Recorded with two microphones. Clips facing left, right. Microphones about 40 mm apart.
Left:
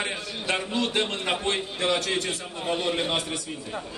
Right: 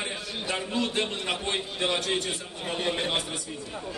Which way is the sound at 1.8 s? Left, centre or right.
Left.